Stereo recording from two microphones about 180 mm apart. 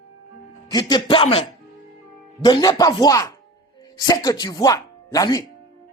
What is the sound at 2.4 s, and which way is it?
Speech, 20° left (ahead or behind).